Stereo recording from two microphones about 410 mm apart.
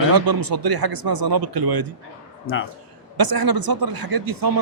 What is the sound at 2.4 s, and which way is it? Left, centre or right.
Speech, left.